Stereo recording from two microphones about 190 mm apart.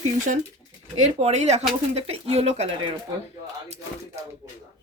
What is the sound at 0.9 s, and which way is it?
Speech, 35° right (ahead or behind).